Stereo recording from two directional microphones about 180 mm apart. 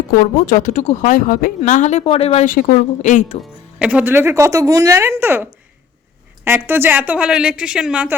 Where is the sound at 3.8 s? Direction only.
5° right (ahead or behind).